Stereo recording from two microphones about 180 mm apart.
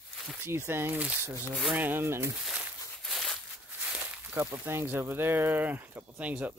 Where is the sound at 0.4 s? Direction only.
15° right (ahead or behind).